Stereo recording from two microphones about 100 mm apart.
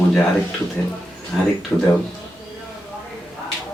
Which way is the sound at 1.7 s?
20° left (ahead or behind).